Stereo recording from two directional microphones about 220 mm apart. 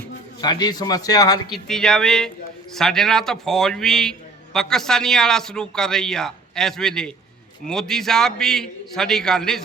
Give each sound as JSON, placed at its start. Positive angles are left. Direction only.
{"t": 0.4, "sound": "a man's voice", "side_deg": 20}
{"t": 1.5, "sound": "a man's voice", "side_deg": 0}